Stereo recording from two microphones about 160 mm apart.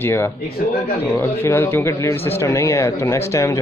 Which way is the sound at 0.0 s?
15° left (ahead or behind).